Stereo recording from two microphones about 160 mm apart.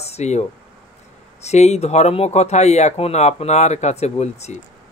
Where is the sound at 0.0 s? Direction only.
45° left (ahead or behind).